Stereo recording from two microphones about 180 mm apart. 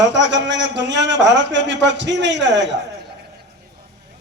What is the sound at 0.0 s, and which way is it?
A man's voice, 80° right.